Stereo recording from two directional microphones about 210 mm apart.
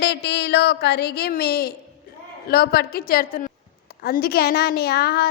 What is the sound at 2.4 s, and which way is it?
A woman's voice, 45° left (ahead or behind).